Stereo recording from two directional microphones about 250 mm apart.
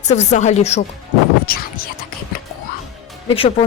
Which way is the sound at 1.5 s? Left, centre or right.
Left.